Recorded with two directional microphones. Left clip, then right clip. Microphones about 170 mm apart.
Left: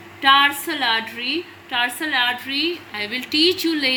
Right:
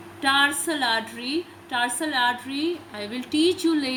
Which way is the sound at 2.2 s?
45° right (ahead or behind).